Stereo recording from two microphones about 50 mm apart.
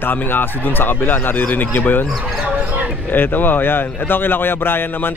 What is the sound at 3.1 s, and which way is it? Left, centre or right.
Speech, left.